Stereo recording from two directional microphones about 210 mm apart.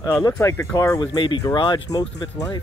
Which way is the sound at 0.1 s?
15° left (ahead or behind).